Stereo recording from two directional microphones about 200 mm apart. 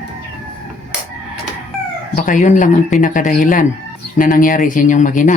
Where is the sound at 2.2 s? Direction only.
40° left (ahead or behind).